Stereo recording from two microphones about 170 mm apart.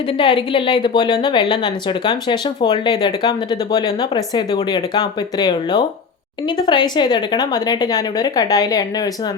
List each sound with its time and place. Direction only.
0.2 s a woman's voice: 30° left (ahead or behind)